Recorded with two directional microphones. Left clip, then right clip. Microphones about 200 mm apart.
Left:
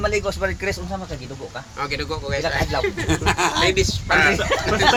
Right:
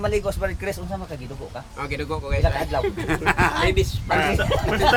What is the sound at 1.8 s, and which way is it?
Speech, centre (ahead or behind).